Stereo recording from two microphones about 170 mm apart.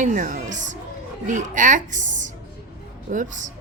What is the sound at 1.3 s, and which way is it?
Speech, 50° right (ahead or behind).